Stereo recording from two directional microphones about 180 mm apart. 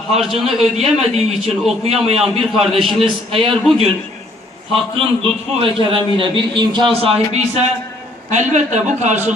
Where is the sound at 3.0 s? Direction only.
30° right (ahead or behind).